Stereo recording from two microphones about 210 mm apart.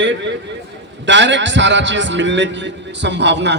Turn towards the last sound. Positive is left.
turn(degrees=-55)  # may be behind; listen again after turning